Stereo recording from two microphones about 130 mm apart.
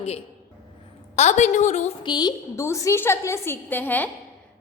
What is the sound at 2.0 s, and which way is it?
A woman's voice, 30° left (ahead or behind).